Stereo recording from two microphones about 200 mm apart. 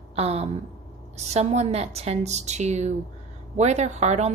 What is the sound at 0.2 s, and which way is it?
A woman's voice, 30° right (ahead or behind).